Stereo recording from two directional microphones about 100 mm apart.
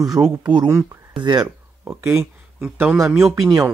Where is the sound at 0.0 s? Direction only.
35° right (ahead or behind).